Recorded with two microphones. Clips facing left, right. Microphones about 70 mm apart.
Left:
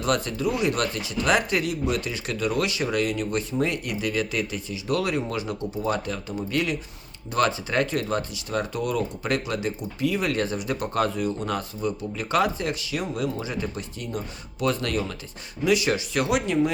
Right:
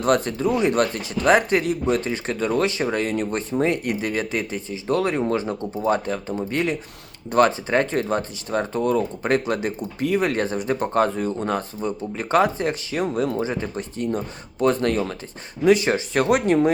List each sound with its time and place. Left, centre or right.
0.0 s speech: right